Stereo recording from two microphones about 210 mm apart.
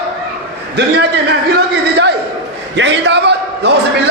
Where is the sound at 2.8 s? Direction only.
55° right (ahead or behind).